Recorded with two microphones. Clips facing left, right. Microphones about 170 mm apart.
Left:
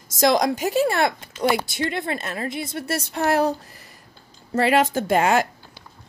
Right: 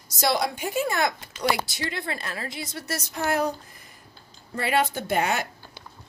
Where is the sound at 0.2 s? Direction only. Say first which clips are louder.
Left 6 dB; 90° left.